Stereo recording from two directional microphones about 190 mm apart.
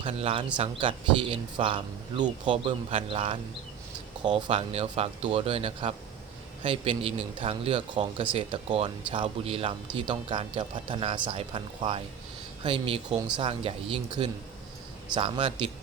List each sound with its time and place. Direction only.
0.0 s speech: 30° right (ahead or behind)